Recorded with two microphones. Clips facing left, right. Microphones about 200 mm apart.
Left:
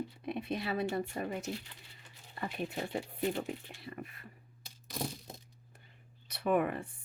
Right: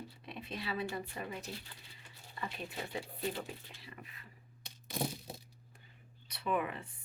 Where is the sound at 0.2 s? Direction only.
55° left (ahead or behind).